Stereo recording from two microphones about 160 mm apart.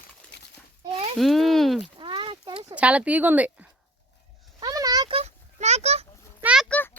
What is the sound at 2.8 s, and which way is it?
Speech, 10° right (ahead or behind).